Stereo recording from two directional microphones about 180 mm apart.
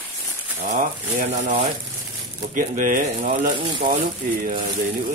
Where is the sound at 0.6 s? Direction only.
50° right (ahead or behind).